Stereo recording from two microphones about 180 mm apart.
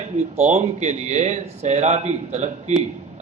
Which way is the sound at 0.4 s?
40° right (ahead or behind).